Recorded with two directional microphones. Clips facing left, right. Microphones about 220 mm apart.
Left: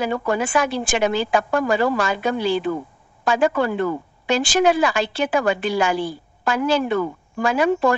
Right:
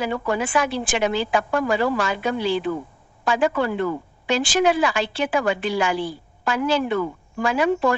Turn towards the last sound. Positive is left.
turn(degrees=45)  # may be behind; listen again after turning